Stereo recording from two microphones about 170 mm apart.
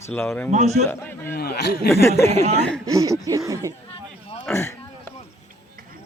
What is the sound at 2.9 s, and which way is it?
Speech, 20° right (ahead or behind).